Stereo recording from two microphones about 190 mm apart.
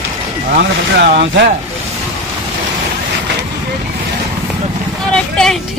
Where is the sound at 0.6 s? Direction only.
60° right (ahead or behind).